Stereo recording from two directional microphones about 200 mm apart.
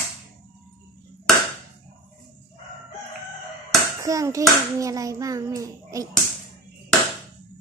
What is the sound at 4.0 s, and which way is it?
A child's voice, 15° right (ahead or behind).